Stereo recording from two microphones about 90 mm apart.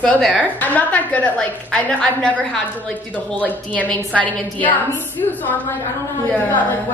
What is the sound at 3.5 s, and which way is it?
A woman's voice, 15° left (ahead or behind).